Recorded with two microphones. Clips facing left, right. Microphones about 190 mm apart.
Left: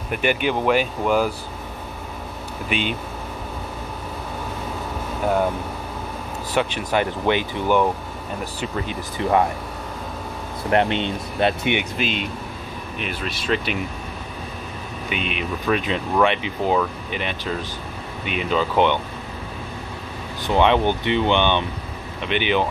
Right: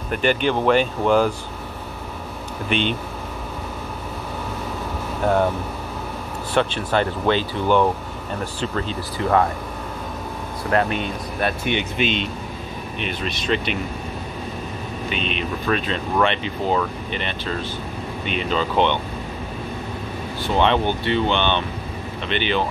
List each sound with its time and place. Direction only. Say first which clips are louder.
0.1 s speech: right 2 dB; 10° left (ahead or behind)
2.7 s speech: right 3 dB; 5° left (ahead or behind)
6.5 s speech: right 1 dB; 10° left (ahead or behind)
10.7 s speech: left 1 dB; 25° left (ahead or behind)
12.0 s speech: right 2 dB; 5° left (ahead or behind)
15.0 s speech: even; 10° left (ahead or behind)
20.4 s speech: left 2 dB; 15° left (ahead or behind)